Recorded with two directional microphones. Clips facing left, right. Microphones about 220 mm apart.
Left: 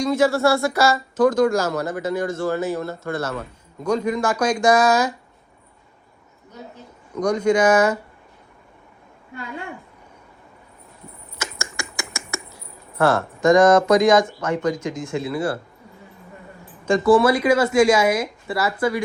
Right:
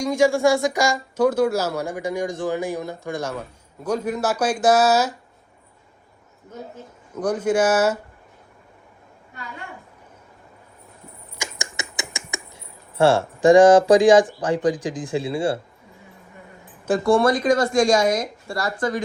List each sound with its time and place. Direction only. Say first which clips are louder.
0.0 s speech: even; 15° right (ahead or behind)
7.2 s speech: left 2 dB; 5° right (ahead or behind)
11.3 s a sound: left 1 dB; 15° right (ahead or behind)
12.5 s speech: right 2 dB; 30° right (ahead or behind)
17.1 s a woman's voice: left 2 dB; 5° left (ahead or behind)